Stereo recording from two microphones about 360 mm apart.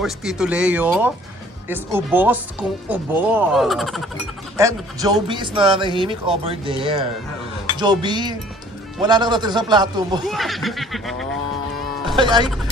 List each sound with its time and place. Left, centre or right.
0.0 s speech: centre
10.2 s speech: centre
12.2 s speech: centre